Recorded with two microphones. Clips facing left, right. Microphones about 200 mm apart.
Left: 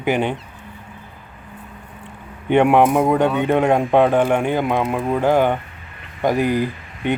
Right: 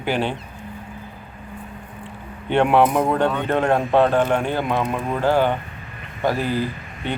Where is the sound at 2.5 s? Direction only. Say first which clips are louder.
Left 3 dB; 15° left (ahead or behind).